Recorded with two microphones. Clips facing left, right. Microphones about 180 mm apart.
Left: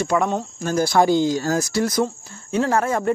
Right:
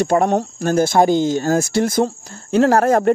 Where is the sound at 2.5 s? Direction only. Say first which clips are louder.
Right 6 dB; 75° right (ahead or behind).